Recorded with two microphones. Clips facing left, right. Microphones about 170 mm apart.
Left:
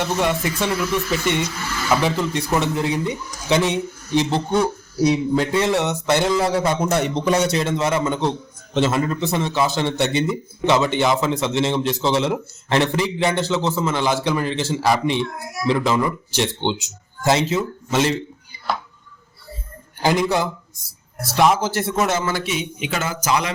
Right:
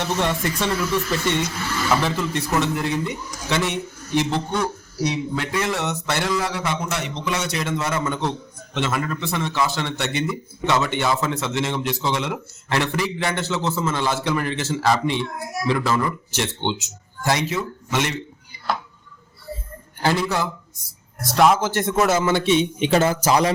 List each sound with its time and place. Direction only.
0.2 s a man's voice: 10° left (ahead or behind)
4.6 s a man's voice: 30° left (ahead or behind)
20.0 s a man's voice: 15° left (ahead or behind)
21.2 s a man's voice: centre (ahead or behind)
22.3 s a man's voice: 25° right (ahead or behind)